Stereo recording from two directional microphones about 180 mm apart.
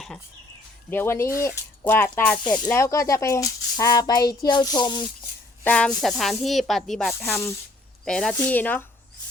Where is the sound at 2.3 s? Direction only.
25° left (ahead or behind).